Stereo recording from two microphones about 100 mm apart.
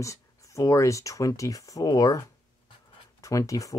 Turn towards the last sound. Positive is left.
turn(degrees=35)  # may be behind; listen again after turning